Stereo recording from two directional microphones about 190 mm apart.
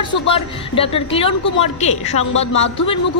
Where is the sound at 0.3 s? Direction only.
30° left (ahead or behind).